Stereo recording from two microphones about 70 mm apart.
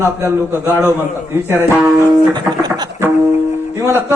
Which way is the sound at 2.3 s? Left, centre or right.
Right.